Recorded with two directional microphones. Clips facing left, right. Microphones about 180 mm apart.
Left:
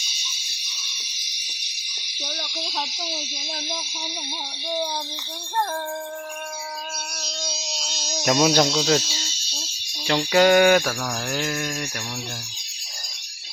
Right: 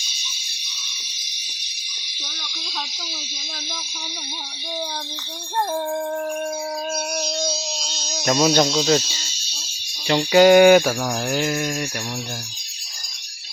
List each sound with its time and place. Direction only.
7.8 s a sound: centre (ahead or behind)
8.2 s speech: 5° left (ahead or behind)
10.1 s mantra: 5° right (ahead or behind)